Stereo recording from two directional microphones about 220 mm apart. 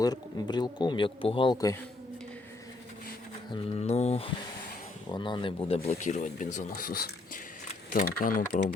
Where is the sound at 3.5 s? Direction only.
25° left (ahead or behind).